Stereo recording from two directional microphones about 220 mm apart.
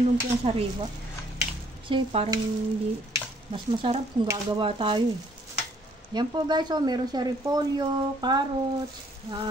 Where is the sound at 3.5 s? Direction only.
25° right (ahead or behind).